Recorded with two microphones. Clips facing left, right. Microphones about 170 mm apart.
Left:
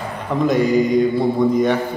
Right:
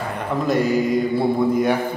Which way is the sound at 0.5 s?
Centre (ahead or behind).